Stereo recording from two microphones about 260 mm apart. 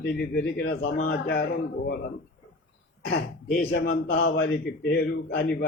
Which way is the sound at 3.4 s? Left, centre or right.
Left.